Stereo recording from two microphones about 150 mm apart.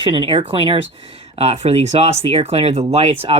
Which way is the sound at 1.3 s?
45° right (ahead or behind).